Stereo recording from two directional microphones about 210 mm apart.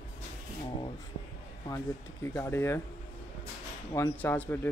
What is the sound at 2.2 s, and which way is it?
Speech, 10° left (ahead or behind).